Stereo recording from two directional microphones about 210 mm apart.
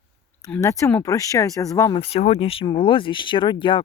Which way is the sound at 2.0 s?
30° left (ahead or behind).